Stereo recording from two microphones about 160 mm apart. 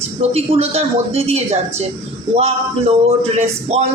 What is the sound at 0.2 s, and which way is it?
A woman's voice, 40° right (ahead or behind).